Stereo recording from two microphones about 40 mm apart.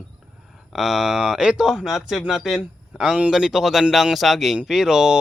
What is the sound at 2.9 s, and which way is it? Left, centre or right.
Speech, right.